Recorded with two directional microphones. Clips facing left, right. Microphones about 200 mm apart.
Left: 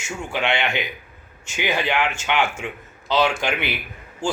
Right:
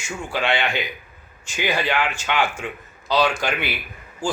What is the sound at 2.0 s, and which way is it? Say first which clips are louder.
A man's voice: left 1 dB; 25° left (ahead or behind).